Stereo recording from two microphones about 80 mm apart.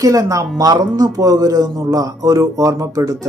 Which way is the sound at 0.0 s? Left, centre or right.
Right.